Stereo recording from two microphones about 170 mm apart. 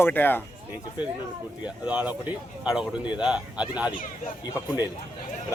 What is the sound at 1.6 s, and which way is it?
Speech, 10° right (ahead or behind).